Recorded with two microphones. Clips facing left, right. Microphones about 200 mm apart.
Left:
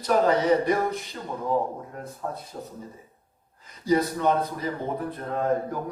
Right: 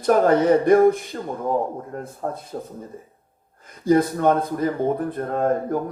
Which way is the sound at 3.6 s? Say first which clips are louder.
Right 5 dB; 50° right (ahead or behind).